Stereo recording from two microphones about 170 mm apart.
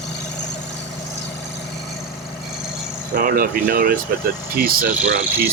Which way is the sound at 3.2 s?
55° right (ahead or behind).